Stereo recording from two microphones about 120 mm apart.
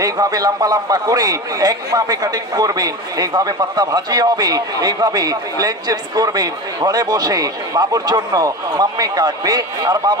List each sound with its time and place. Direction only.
0.0 s a man's voice: 30° right (ahead or behind)